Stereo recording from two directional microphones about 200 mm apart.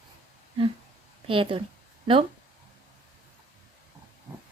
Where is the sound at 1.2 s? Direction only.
25° right (ahead or behind).